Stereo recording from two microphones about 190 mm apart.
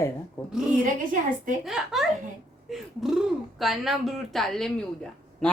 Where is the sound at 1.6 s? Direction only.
Centre (ahead or behind).